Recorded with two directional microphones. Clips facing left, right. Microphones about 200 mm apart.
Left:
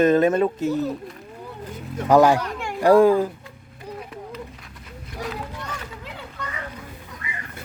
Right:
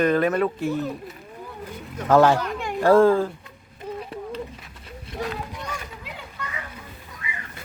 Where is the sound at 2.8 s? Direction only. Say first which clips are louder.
Left 1 dB; 15° left (ahead or behind).